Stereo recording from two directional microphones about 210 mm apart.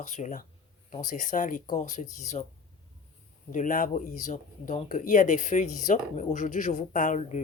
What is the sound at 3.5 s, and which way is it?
Speech, 40° left (ahead or behind).